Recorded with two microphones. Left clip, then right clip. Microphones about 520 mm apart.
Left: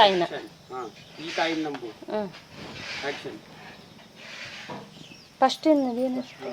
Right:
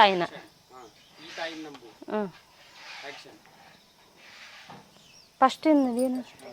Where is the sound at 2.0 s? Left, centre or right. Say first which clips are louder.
Even; right.